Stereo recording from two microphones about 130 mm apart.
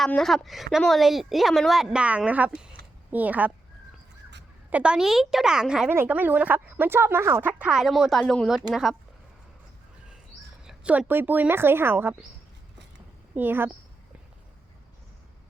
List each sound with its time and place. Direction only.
0.0 s a woman's voice: 5° left (ahead or behind); by 3.5 s 10° right (ahead or behind)
4.7 s a woman's voice: 10° right (ahead or behind)
5.9 s a woman's voice: 15° right (ahead or behind); by 9.0 s centre (ahead or behind)
10.6 s speech: 10° right (ahead or behind)
13.3 s speech: 15° right (ahead or behind)